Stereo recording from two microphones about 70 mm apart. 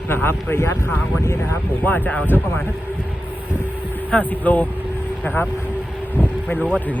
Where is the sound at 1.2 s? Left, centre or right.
Left.